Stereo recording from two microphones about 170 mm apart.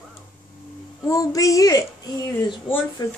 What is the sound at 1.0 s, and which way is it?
Speech, 20° left (ahead or behind).